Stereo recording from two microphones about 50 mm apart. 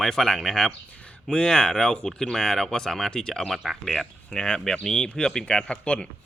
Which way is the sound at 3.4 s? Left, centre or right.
Centre.